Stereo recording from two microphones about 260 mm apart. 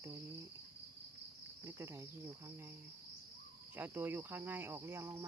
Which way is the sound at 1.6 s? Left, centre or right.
Centre.